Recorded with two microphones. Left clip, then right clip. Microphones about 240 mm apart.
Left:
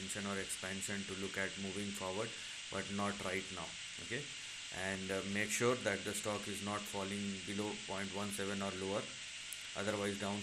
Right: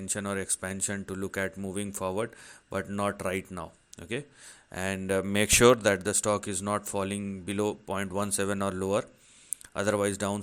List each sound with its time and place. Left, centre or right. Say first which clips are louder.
0.1 s speech: right 11 dB; right
4.7 s speech: right 11 dB; right